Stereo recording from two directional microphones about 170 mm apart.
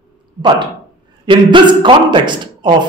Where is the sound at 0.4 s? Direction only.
25° right (ahead or behind).